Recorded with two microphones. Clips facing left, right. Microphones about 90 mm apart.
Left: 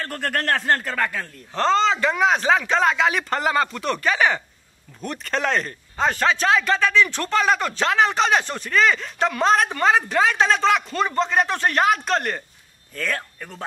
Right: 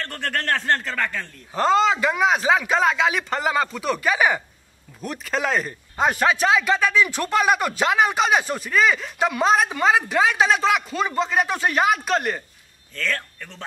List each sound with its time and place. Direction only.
0.0 s speech: 5° left (ahead or behind)
1.5 s speech: 10° right (ahead or behind)
12.9 s speech: 10° left (ahead or behind)